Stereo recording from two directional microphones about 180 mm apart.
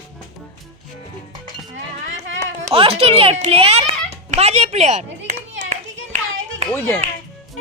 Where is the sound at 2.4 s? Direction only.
35° right (ahead or behind).